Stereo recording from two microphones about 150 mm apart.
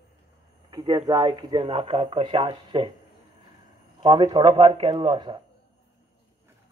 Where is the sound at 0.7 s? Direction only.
30° right (ahead or behind).